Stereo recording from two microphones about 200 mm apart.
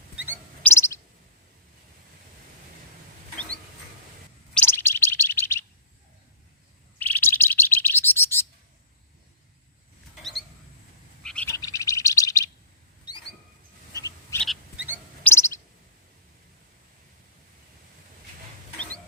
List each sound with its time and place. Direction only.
0.7 s bird: 15° left (ahead or behind)
4.5 s bird: 10° left (ahead or behind)
7.0 s bird: 10° left (ahead or behind)
11.2 s bird: 5° left (ahead or behind)
13.1 s rodents: 20° left (ahead or behind)
13.9 s frog: 15° left (ahead or behind)
15.2 s bird: 15° left (ahead or behind)